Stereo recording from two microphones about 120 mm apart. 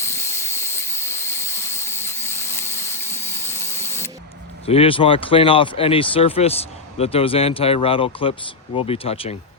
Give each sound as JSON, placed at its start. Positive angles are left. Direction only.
{"t": 0.0, "sound": "vehicle", "side_deg": 20}
{"t": 4.6, "sound": "speech", "side_deg": 55}